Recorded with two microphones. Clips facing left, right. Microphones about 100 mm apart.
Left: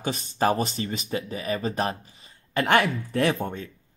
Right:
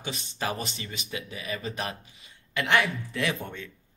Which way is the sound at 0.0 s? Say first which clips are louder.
Left 8 dB; 40° left (ahead or behind).